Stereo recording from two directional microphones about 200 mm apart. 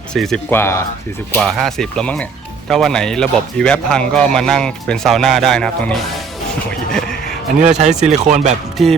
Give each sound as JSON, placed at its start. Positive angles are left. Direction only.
{"t": 0.1, "sound": "speech", "side_deg": 5}
{"t": 6.9, "sound": "a sound", "side_deg": 5}
{"t": 8.0, "sound": "speech", "side_deg": -35}
{"t": 8.8, "sound": "speech", "side_deg": 0}